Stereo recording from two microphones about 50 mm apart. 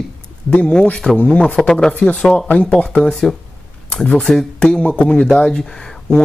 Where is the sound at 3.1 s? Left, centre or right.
Centre.